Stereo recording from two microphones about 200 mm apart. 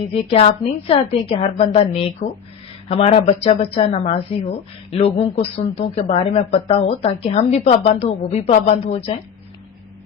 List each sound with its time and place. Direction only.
0.1 s speech: 30° left (ahead or behind)